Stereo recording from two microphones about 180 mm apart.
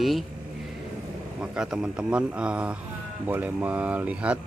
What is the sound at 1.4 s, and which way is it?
Speech, 5° right (ahead or behind).